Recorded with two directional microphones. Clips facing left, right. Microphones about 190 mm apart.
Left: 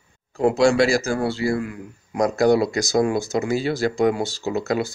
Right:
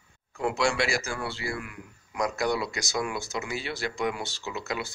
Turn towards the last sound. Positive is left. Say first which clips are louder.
# left 11 dB
turn(degrees=40)  # may be behind; listen again after turning